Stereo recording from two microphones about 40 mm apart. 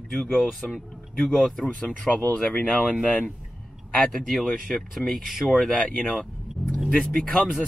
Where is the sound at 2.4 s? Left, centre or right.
Left.